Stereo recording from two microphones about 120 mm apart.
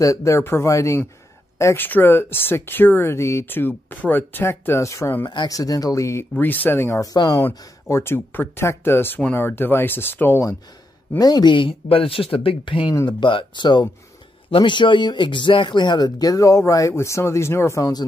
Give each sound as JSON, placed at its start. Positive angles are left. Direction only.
{"t": 0.0, "sound": "speech", "side_deg": 25}
{"t": 5.3, "sound": "speech", "side_deg": 35}
{"t": 6.3, "sound": "speech", "side_deg": 15}
{"t": 11.1, "sound": "speech", "side_deg": 35}